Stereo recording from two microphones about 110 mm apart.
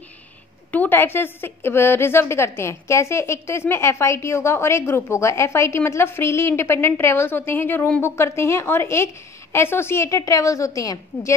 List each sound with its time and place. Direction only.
0.7 s a woman's voice: 15° left (ahead or behind)